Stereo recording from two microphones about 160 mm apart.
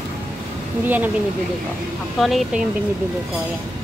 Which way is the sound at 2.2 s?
Centre (ahead or behind).